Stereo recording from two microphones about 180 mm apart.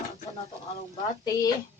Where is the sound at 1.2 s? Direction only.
20° left (ahead or behind).